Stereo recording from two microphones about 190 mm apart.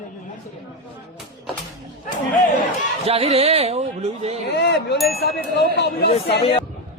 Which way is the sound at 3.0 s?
30° right (ahead or behind).